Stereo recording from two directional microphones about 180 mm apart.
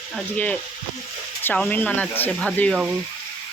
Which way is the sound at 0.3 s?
10° left (ahead or behind).